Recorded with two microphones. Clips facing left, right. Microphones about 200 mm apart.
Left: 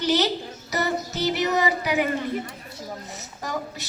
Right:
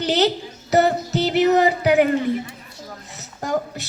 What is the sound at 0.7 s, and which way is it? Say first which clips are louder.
Music: right 9 dB; 65° right (ahead or behind).